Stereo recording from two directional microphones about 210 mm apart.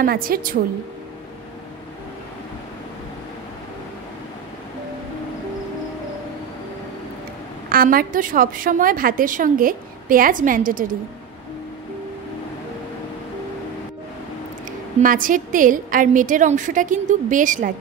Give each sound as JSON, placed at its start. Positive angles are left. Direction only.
{"t": 0.0, "sound": "a woman's voice", "side_deg": -45}
{"t": 7.7, "sound": "a woman's voice", "side_deg": -45}
{"t": 15.0, "sound": "a woman's voice", "side_deg": -40}